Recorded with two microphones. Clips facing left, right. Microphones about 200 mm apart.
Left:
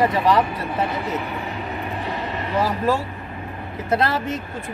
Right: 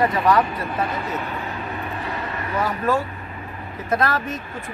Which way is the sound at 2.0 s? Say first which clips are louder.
Left 2 dB; 25° left (ahead or behind).